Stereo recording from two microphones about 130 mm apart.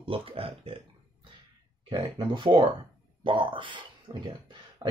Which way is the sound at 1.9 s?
40° right (ahead or behind).